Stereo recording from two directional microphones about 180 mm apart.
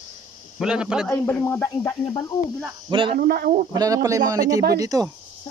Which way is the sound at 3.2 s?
55° right (ahead or behind).